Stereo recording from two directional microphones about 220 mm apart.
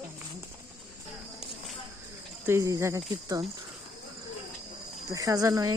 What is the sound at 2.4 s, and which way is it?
Speech, 10° right (ahead or behind).